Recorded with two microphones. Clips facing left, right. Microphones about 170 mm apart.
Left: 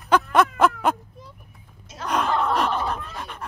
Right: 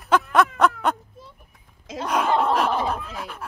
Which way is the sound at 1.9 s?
90° right.